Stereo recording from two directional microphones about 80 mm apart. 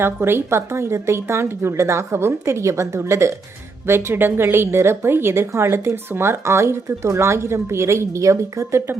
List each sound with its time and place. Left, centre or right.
0.0 s a woman's voice: right